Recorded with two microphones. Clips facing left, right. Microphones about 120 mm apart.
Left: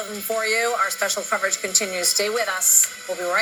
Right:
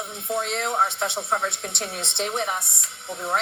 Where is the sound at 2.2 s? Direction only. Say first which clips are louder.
Left 4 dB; 20° right (ahead or behind).